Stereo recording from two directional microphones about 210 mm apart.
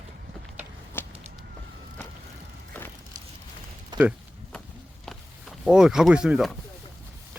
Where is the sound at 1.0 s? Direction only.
10° left (ahead or behind).